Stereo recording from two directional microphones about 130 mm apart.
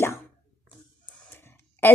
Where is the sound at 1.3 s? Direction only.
20° left (ahead or behind).